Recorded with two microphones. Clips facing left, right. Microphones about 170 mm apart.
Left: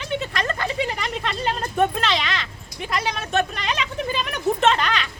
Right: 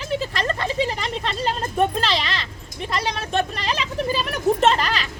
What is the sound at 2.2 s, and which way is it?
Speech, 30° right (ahead or behind).